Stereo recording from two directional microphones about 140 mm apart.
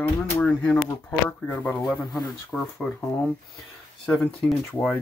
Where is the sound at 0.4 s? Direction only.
5° left (ahead or behind).